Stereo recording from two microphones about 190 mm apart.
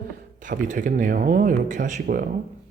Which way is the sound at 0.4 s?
40° right (ahead or behind).